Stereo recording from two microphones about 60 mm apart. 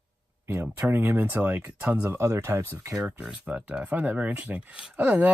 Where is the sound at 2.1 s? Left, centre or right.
Right.